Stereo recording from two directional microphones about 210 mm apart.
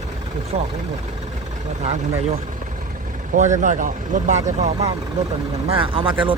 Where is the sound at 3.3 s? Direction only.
35° right (ahead or behind).